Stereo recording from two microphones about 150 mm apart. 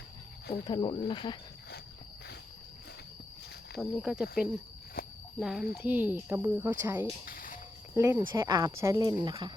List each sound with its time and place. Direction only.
0.6 s speech: 30° left (ahead or behind)
3.8 s speech: 5° right (ahead or behind)
5.0 s a sound: 80° left
5.4 s speech: 5° right (ahead or behind)
7.3 s cricket: 65° left (ahead or behind)
7.9 s speech: 20° right (ahead or behind)